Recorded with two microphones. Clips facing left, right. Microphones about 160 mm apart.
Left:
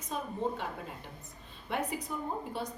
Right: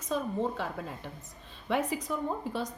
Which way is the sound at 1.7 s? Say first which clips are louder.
Right 5 dB; 90° right.